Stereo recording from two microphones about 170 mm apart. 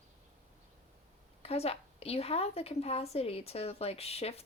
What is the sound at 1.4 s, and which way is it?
A woman's voice, 35° left (ahead or behind).